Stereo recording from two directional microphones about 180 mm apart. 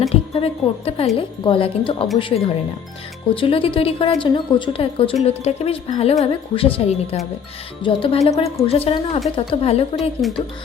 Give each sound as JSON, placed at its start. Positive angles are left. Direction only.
{"t": 0.1, "sound": "a woman's voice", "side_deg": 35}
{"t": 10.0, "sound": "speech", "side_deg": 0}